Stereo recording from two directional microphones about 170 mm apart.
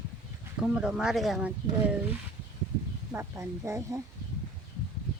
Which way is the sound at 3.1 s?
15° right (ahead or behind).